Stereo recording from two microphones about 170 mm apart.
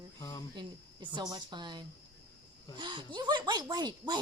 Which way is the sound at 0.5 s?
25° right (ahead or behind).